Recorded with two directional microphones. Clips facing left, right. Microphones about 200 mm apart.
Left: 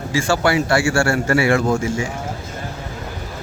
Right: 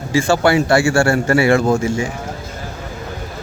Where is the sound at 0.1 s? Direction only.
25° right (ahead or behind).